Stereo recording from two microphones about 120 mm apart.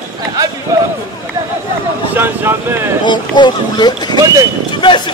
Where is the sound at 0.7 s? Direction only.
25° right (ahead or behind).